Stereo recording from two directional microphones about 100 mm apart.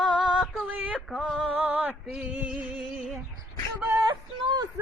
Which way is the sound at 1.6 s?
15° right (ahead or behind).